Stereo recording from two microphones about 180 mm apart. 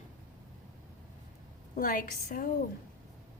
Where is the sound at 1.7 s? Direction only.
50° left (ahead or behind).